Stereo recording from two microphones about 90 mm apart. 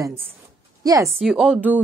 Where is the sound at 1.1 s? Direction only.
5° right (ahead or behind).